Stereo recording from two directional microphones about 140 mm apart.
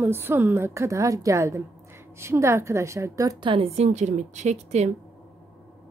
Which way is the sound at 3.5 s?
45° right (ahead or behind).